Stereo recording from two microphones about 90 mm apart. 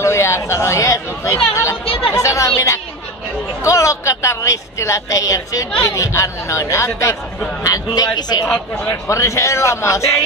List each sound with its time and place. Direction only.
0.0 s a man's voice: 30° left (ahead or behind); by 8.5 s 50° left (ahead or behind)
9.0 s speech: 35° left (ahead or behind)